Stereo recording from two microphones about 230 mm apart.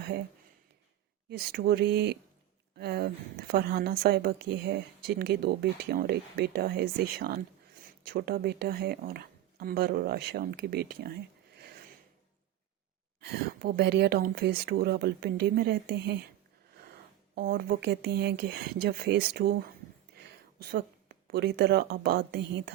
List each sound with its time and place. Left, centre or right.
1.3 s a woman's voice: right
13.2 s a woman's voice: right
17.3 s a woman's voice: right